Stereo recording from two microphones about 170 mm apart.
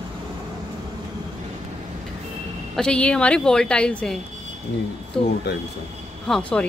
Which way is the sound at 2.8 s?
5° left (ahead or behind).